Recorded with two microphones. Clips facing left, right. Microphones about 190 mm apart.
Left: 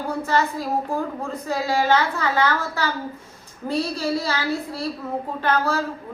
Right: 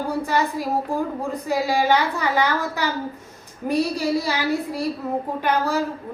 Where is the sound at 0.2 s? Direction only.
15° right (ahead or behind).